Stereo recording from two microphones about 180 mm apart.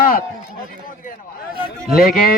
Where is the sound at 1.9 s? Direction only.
55° left (ahead or behind).